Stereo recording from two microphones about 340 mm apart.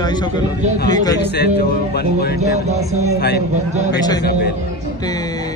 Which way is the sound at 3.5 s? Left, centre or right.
Centre.